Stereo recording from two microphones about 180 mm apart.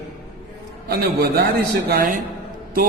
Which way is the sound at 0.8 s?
60° right (ahead or behind).